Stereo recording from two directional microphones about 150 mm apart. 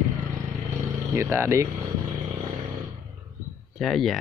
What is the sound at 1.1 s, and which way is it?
Speech, 15° right (ahead or behind).